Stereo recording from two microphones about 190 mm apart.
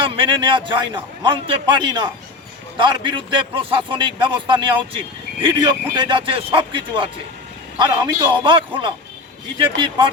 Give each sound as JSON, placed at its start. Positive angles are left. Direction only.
{"t": 0.0, "sound": "a man's voice", "side_deg": -25}